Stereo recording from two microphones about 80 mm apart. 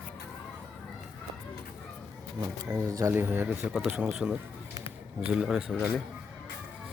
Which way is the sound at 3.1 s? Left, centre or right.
Right.